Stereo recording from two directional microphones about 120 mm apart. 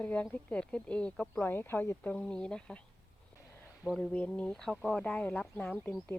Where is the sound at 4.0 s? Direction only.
10° left (ahead or behind).